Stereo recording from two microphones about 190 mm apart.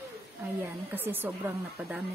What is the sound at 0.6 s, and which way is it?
A woman's voice, 10° right (ahead or behind).